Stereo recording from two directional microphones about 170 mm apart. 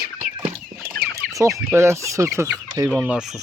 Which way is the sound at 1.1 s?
20° right (ahead or behind).